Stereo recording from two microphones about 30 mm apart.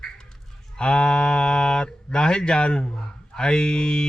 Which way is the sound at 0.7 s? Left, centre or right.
Left.